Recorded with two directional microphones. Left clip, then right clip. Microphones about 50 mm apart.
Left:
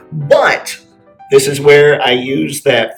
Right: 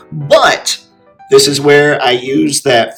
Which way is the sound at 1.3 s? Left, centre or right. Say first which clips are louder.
Even; right.